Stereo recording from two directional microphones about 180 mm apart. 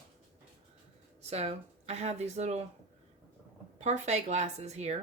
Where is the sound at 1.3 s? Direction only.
35° right (ahead or behind).